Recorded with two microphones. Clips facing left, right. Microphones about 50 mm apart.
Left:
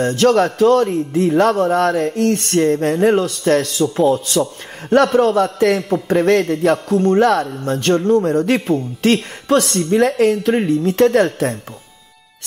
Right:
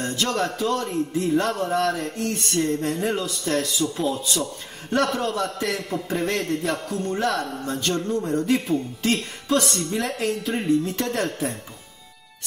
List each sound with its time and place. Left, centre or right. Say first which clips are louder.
0.0 s music: left 11 dB; left
6.0 s music: left 12 dB; left